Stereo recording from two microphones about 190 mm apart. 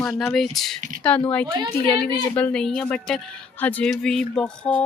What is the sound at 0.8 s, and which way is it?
Speech, 45° right (ahead or behind).